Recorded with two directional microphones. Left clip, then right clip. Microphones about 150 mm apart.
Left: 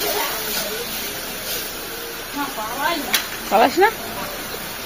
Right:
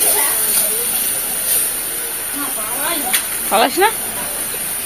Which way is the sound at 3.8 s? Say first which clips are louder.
Right 2 dB; 20° left (ahead or behind).